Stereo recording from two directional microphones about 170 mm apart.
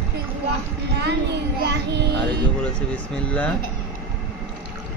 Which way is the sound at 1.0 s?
80° right.